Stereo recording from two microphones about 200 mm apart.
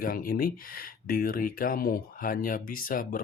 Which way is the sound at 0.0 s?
45° left (ahead or behind).